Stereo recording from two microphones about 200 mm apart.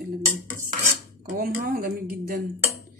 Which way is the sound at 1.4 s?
45° right (ahead or behind).